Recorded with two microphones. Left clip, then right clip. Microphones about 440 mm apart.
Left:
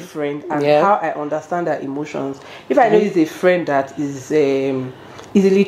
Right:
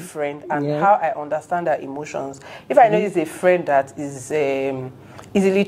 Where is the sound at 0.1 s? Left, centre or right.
Right.